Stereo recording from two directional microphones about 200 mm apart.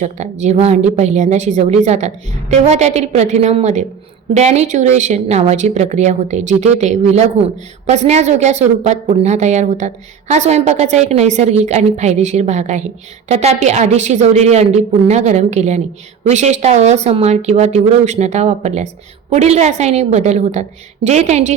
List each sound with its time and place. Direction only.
0.0 s a woman's voice: 35° right (ahead or behind)